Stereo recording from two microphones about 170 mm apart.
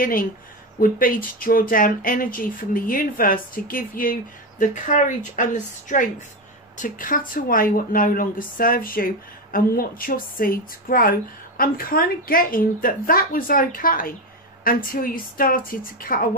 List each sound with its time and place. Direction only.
0.0 s speech: 55° left (ahead or behind)